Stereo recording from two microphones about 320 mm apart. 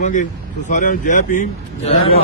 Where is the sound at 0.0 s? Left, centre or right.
Left.